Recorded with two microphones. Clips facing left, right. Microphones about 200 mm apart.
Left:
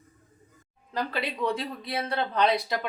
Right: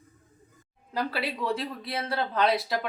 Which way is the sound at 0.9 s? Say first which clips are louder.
Even; 5° right (ahead or behind).